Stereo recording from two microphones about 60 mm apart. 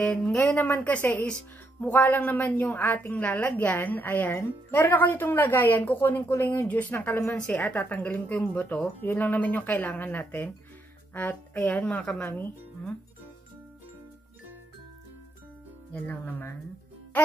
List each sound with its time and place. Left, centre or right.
0.0 s a woman's voice: centre
7.3 s a woman's voice: centre
11.8 s speech: centre
15.9 s speech: left